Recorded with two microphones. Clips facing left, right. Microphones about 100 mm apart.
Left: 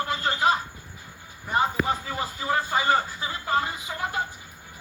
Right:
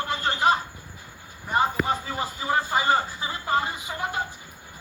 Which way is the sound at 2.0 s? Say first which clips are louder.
Even; 25° right (ahead or behind).